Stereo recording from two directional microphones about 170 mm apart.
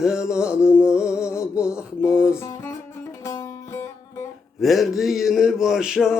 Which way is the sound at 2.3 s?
15° left (ahead or behind).